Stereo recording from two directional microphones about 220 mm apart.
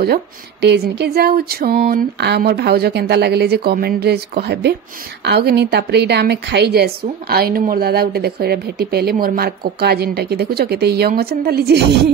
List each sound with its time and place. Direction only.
0.0 s a woman's voice: 45° right (ahead or behind)